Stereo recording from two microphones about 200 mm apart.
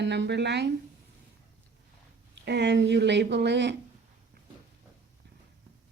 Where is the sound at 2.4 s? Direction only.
60° right (ahead or behind).